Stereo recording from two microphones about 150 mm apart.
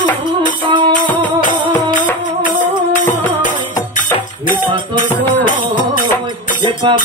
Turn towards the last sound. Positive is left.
turn(degrees=-30)  # may be behind; listen again after turning